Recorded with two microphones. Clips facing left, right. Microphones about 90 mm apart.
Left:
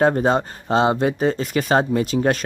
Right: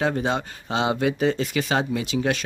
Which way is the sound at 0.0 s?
45° left (ahead or behind).